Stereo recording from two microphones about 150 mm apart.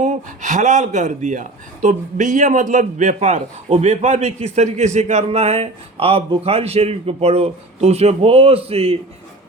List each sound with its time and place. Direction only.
0.0 s speech: 55° right (ahead or behind)